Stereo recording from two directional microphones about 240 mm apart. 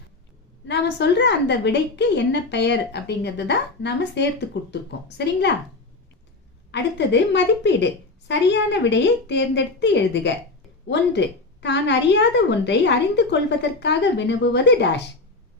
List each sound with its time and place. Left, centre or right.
0.7 s a woman's voice: left
6.7 s a woman's voice: left